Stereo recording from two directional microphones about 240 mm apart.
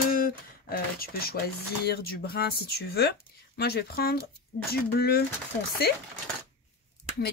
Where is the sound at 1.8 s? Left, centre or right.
Left.